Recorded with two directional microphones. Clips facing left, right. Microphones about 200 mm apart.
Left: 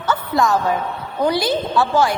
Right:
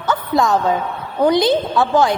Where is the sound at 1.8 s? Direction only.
20° right (ahead or behind).